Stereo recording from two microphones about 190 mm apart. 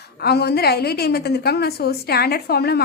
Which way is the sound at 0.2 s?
60° left (ahead or behind).